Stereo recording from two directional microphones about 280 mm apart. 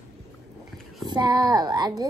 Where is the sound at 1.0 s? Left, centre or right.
Centre.